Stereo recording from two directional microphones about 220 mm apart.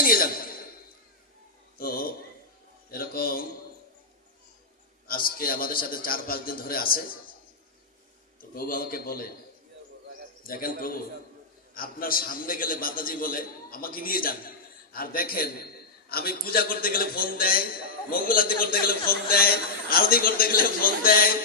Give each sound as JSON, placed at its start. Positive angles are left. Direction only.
{"t": 0.0, "sound": "a sound", "side_deg": 40}
{"t": 1.8, "sound": "a sound", "side_deg": 40}
{"t": 2.9, "sound": "a man's voice", "side_deg": 40}
{"t": 5.0, "sound": "a man's voice", "side_deg": 40}
{"t": 8.4, "sound": "a man's voice", "side_deg": 40}
{"t": 10.4, "sound": "a man's voice", "side_deg": 40}